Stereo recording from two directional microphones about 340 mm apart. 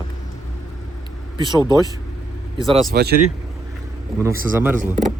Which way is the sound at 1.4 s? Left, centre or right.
Centre.